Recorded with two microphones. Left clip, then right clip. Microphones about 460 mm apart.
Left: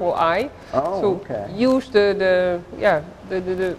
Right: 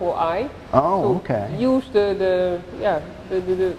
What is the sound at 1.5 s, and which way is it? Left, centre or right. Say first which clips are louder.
Speech: left 3 dB; left.